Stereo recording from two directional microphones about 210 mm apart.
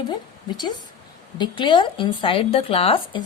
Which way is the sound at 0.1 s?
20° left (ahead or behind).